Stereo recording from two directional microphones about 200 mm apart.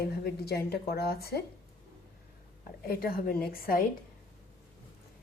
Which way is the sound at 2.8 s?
50° left (ahead or behind).